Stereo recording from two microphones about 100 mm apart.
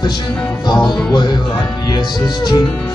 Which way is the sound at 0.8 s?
45° left (ahead or behind).